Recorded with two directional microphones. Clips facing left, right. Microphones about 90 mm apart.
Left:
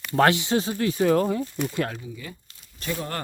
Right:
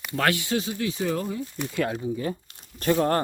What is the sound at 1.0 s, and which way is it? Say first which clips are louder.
Speech: left 9 dB; 65° left (ahead or behind).